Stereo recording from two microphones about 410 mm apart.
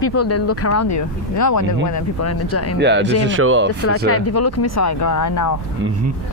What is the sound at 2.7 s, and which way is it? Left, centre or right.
Speech, right.